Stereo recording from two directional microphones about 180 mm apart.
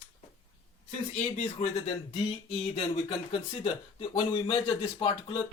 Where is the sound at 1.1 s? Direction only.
40° left (ahead or behind).